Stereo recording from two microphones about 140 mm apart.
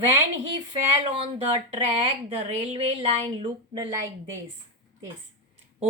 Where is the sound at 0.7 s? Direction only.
45° right (ahead or behind).